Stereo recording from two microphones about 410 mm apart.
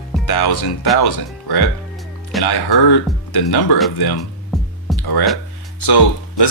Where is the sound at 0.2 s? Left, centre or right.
Left.